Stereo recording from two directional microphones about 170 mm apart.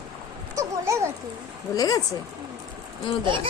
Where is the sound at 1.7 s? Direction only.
20° left (ahead or behind).